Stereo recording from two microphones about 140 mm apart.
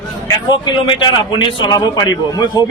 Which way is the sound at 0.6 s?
35° left (ahead or behind).